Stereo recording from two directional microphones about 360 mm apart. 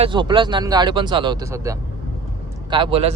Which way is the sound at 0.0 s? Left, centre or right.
Centre.